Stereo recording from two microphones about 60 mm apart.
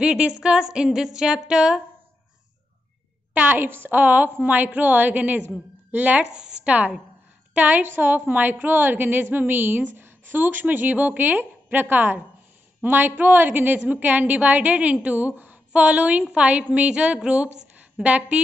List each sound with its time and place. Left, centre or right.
0.0 s speech: centre
3.3 s a woman's voice: right